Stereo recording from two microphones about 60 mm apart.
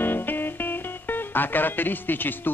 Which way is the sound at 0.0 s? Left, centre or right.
Left.